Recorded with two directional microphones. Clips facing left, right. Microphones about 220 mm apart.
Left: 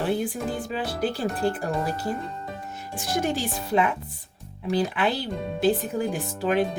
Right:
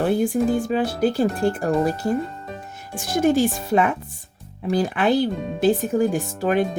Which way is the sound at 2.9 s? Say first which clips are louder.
Right 8 dB; 45° right (ahead or behind).